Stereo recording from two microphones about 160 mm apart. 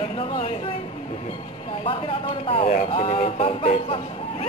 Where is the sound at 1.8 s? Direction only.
35° left (ahead or behind).